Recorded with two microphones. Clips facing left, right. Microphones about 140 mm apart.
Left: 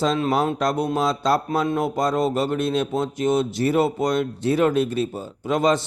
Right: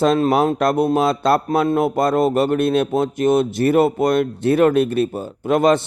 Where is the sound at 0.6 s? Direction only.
55° right (ahead or behind).